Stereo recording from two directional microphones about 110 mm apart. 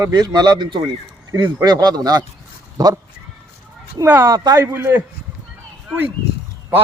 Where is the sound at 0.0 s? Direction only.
35° right (ahead or behind).